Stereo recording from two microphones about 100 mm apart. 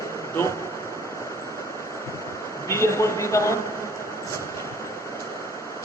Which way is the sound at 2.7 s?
30° left (ahead or behind).